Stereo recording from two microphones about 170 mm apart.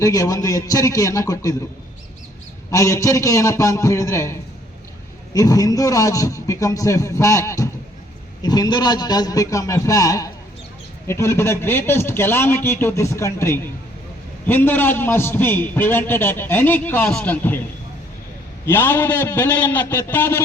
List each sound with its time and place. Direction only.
0.0 s a man's voice: 20° left (ahead or behind)
2.6 s a man's voice: 20° left (ahead or behind)
18.6 s a man's voice: 15° left (ahead or behind)